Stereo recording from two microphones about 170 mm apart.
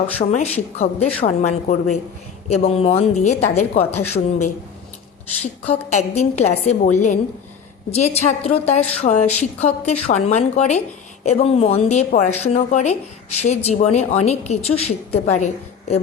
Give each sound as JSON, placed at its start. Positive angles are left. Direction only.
{"t": 0.2, "sound": "a woman's voice", "side_deg": 40}
{"t": 5.9, "sound": "a woman's voice", "side_deg": 40}